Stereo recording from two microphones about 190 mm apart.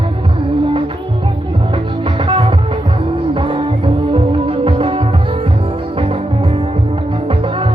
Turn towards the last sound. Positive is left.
turn(degrees=-25)  # may be behind; listen again after turning